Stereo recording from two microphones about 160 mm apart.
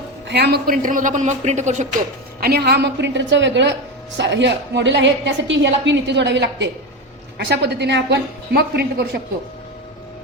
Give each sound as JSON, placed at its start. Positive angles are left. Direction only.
{"t": 0.3, "sound": "a man's voice", "side_deg": -90}
{"t": 2.4, "sound": "a woman's voice", "side_deg": -85}